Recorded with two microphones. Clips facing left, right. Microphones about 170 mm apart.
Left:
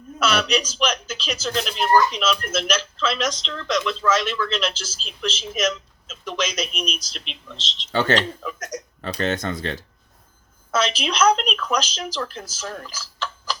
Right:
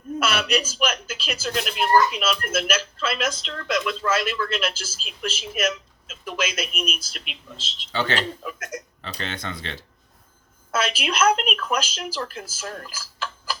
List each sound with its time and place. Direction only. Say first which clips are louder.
0.7 s speech: left 2 dB; 5° right (ahead or behind)
7.9 s speech: left 5 dB; 45° left (ahead or behind)
8.4 s speech: left 2 dB; 5° right (ahead or behind)
9.0 s speech: left 13 dB; 45° left (ahead or behind)
10.9 s speech: left 1 dB; 5° right (ahead or behind)